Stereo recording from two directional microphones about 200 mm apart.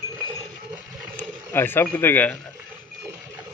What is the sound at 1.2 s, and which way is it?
Speech, 10° left (ahead or behind).